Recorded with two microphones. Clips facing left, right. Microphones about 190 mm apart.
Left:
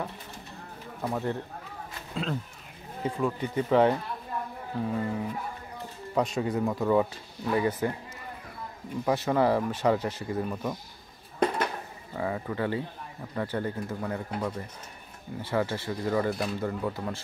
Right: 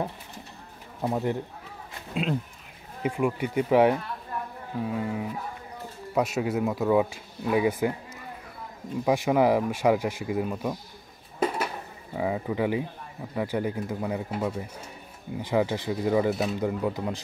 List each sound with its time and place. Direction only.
1.0 s speech: 15° right (ahead or behind)
9.0 s speech: 10° right (ahead or behind)
11.3 s a sound: 5° right (ahead or behind)
12.2 s speech: 15° right (ahead or behind)
16.5 s speech: 15° right (ahead or behind)